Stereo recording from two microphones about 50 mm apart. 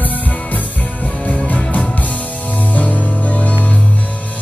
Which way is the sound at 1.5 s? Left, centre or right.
Left.